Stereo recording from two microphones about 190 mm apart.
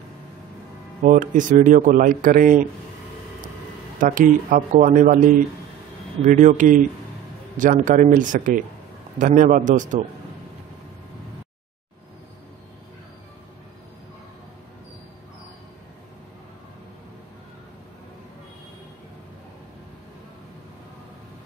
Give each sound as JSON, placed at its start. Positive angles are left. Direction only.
{"t": 1.0, "sound": "speech", "side_deg": -45}
{"t": 4.0, "sound": "speech", "side_deg": -45}
{"t": 6.2, "sound": "speech", "side_deg": -40}